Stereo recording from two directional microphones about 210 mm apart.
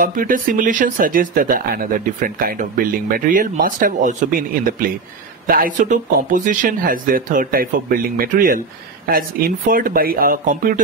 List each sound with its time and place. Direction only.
0.0 s speech: 40° right (ahead or behind)